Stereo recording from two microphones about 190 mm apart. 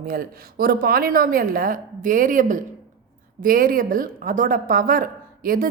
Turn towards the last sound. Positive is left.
turn(degrees=-50)  # may be behind; listen again after turning